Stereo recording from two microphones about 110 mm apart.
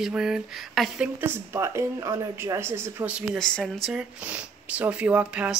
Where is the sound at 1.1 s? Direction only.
20° right (ahead or behind).